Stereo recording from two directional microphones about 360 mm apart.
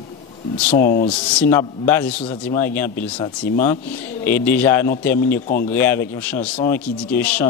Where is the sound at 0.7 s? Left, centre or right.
Left.